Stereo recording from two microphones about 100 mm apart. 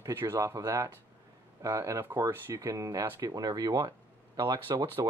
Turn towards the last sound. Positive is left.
turn(degrees=-50)  # may be behind; listen again after turning